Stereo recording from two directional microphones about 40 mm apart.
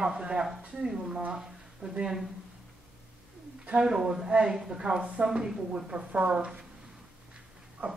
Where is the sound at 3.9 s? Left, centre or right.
Centre.